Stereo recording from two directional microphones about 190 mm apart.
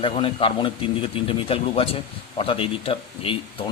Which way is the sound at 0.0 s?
25° left (ahead or behind).